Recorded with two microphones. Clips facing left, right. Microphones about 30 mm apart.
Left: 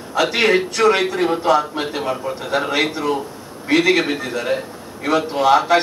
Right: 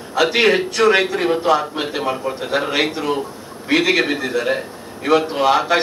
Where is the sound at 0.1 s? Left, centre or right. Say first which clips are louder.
Right 1 dB; centre.